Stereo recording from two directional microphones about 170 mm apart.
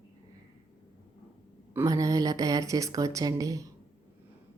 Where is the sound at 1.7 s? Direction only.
20° right (ahead or behind).